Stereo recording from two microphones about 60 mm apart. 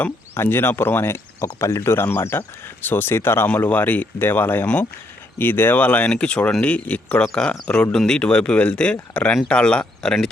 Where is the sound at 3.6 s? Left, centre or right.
Left.